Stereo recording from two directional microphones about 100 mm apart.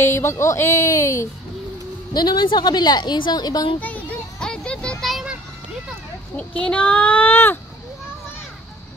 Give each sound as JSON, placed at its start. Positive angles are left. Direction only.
{"t": 0.0, "sound": "speech", "side_deg": 25}
{"t": 2.1, "sound": "a woman's voice", "side_deg": 45}
{"t": 3.8, "sound": "a sound", "side_deg": 15}
{"t": 6.3, "sound": "speech", "side_deg": 15}